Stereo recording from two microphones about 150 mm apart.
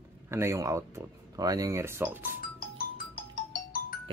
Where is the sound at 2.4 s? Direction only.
70° left (ahead or behind).